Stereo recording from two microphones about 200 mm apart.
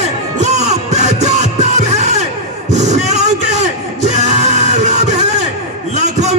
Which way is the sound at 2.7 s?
35° right (ahead or behind).